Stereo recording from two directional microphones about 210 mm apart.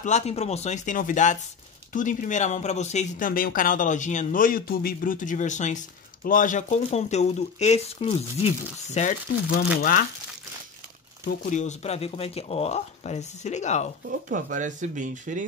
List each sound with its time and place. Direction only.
0.0 s speech: 30° left (ahead or behind)
11.2 s speech: 35° left (ahead or behind)
14.3 s speech: 35° right (ahead or behind)